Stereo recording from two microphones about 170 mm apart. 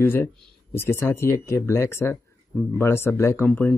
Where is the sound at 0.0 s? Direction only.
15° left (ahead or behind).